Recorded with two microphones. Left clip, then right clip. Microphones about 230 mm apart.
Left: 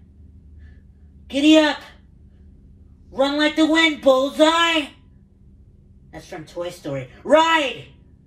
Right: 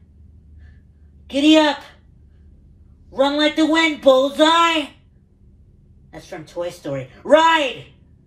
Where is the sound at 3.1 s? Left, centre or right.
Centre.